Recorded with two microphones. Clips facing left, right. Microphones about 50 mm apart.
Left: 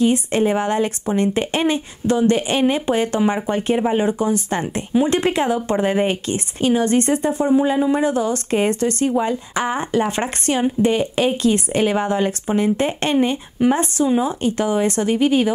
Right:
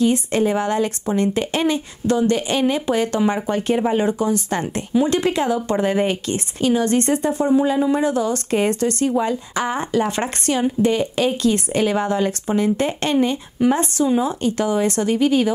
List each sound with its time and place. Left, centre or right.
0.0 s speech: centre